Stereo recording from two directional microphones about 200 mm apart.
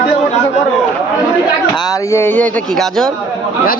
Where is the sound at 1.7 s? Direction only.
20° left (ahead or behind).